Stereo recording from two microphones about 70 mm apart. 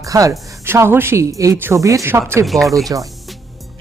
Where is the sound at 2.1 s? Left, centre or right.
Right.